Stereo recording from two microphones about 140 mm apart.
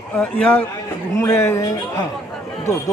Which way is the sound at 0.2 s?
10° left (ahead or behind).